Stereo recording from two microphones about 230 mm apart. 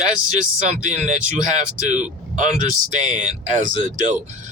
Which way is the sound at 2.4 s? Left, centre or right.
Right.